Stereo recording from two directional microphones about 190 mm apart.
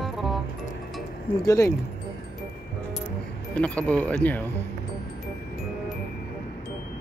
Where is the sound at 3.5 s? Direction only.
5° left (ahead or behind).